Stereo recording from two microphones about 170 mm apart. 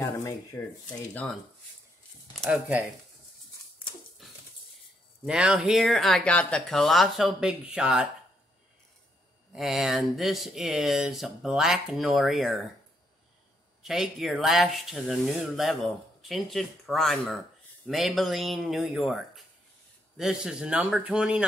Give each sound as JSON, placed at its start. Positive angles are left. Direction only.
{"t": 0.0, "sound": "speech", "side_deg": 20}
{"t": 2.3, "sound": "speech", "side_deg": -5}
{"t": 5.2, "sound": "speech", "side_deg": -5}
{"t": 9.5, "sound": "speech", "side_deg": 0}
{"t": 13.8, "sound": "speech", "side_deg": -5}